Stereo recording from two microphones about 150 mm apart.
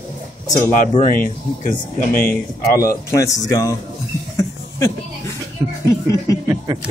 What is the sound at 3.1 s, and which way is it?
Speech, 20° left (ahead or behind).